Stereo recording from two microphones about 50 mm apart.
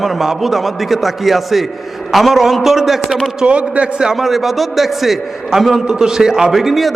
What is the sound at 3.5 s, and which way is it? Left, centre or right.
Speech, right.